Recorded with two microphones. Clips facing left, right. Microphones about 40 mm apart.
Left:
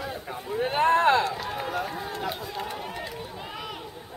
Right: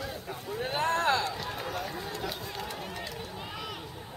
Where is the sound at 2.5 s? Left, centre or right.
Centre.